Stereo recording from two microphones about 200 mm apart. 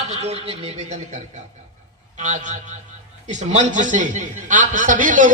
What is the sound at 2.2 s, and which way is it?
A man's voice, 35° right (ahead or behind).